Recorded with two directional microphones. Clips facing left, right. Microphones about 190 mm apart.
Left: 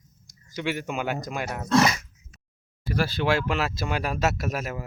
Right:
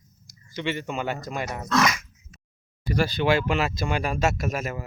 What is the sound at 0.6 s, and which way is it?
Speech, 5° left (ahead or behind).